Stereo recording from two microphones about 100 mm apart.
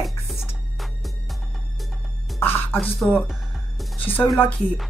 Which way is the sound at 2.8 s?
5° right (ahead or behind).